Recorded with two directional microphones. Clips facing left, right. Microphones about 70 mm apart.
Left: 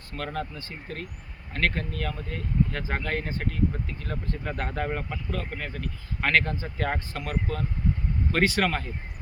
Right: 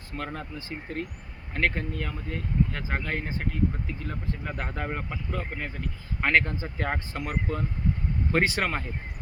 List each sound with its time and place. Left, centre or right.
0.1 s speech: centre